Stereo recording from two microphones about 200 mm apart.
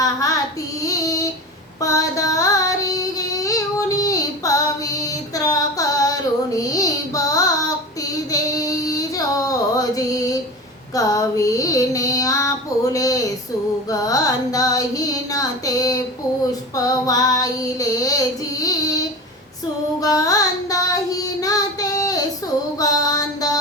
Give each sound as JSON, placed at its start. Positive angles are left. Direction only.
{"t": 0.0, "sound": "child singing", "side_deg": 15}
{"t": 1.8, "sound": "a sound", "side_deg": 15}
{"t": 6.6, "sound": "child singing", "side_deg": 15}
{"t": 8.3, "sound": "female singing", "side_deg": 15}
{"t": 10.9, "sound": "child singing", "side_deg": 15}
{"t": 13.9, "sound": "carnatic music", "side_deg": 20}
{"t": 16.7, "sound": "child singing", "side_deg": 15}
{"t": 20.0, "sound": "child singing", "side_deg": 15}
{"t": 22.8, "sound": "mantra", "side_deg": 20}